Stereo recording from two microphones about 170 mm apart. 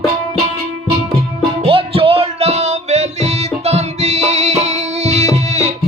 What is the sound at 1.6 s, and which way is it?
Music, 35° right (ahead or behind).